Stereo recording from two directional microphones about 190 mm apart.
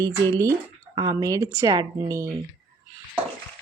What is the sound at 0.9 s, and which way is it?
Speech, 20° right (ahead or behind).